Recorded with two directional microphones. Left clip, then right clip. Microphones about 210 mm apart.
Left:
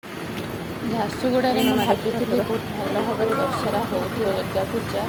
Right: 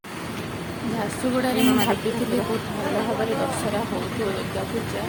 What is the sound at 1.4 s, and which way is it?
Speech, 5° right (ahead or behind).